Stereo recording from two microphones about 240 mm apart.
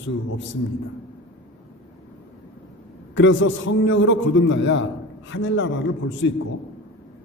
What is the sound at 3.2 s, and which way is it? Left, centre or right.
A man's voice, left.